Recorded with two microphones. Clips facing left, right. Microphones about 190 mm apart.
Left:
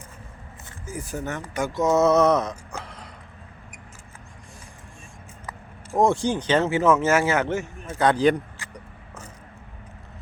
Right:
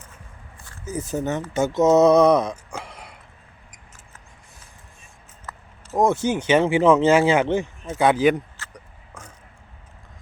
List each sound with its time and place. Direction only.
0.9 s speech: 20° right (ahead or behind)
6.2 s speech: 10° right (ahead or behind)
8.5 s a sound: 10° left (ahead or behind)